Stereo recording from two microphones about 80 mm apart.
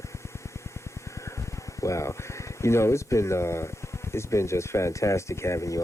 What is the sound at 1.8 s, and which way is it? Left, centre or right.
Speech, left.